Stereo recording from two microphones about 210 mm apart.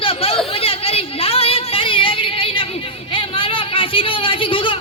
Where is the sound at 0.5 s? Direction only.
25° left (ahead or behind).